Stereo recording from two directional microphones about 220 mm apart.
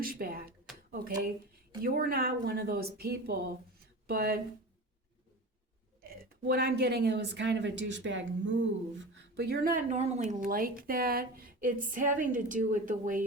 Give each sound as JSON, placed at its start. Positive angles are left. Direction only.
{"t": 0.0, "sound": "speech", "side_deg": -40}
{"t": 6.0, "sound": "speech", "side_deg": -45}